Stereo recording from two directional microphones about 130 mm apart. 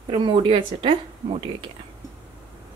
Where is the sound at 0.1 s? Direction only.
40° right (ahead or behind).